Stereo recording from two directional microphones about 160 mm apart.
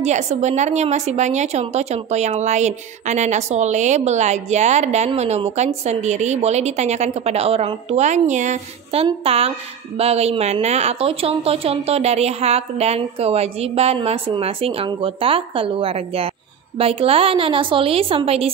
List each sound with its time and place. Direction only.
0.0 s a woman's voice: 45° right (ahead or behind)
9.0 s a woman's voice: 40° right (ahead or behind)